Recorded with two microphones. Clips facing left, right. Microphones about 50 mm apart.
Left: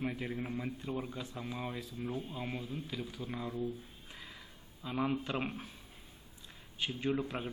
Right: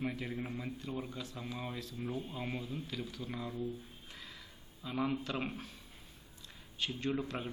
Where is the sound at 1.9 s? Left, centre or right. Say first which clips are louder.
Right 1 dB; centre.